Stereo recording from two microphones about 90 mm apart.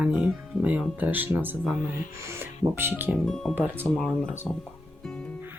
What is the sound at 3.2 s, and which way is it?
Speech, 5° left (ahead or behind).